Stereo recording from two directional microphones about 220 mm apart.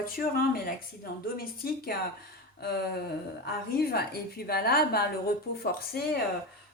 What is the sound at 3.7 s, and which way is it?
Speech, 45° left (ahead or behind).